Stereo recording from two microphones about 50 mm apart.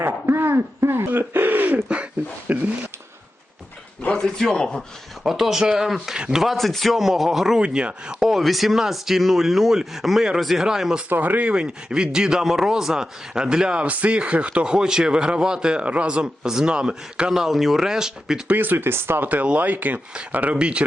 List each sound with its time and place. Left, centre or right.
0.0 s a sound: right
1.2 s speech: right
4.1 s a man's voice: centre
5.2 s speech: centre
6.4 s speech: centre
7.0 s speech: centre
7.6 s speech: right
8.3 s speech: centre
11.1 s speech: right; by 13.8 s centre
13.8 s speech: right; by 18.4 s centre
18.5 s speech: right
19.2 s speech: right